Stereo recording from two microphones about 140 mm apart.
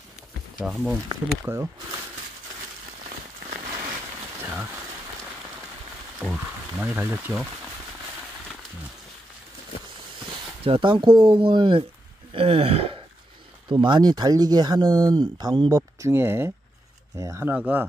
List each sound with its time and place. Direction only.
0.6 s speech: centre (ahead or behind)
1.0 s speech: 20° right (ahead or behind)
6.2 s speech: 5° right (ahead or behind)
10.6 s speech: 40° right (ahead or behind)
12.3 s a sound: 45° right (ahead or behind)
13.7 s speech: 35° right (ahead or behind)
15.7 s speech: 20° right (ahead or behind)